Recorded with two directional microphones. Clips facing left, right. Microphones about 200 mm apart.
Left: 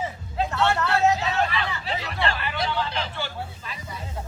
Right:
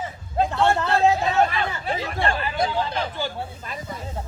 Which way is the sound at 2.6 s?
45° right (ahead or behind).